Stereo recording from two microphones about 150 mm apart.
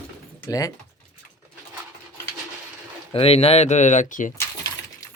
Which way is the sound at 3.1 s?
40° left (ahead or behind).